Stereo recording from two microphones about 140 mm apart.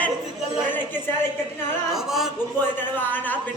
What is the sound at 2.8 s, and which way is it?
Speech, 15° left (ahead or behind).